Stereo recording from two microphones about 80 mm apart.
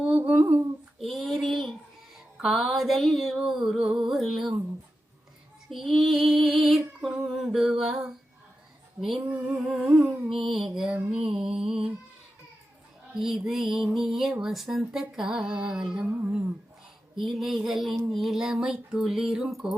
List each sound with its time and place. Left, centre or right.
0.0 s humming: centre
0.9 s a sound: centre
2.1 s music: centre
5.7 s music: centre
9.0 s female singing: centre
9.3 s music: centre
13.1 s music: centre
17.2 s music: centre